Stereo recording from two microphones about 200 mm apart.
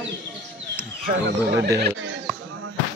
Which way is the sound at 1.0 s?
55° right (ahead or behind).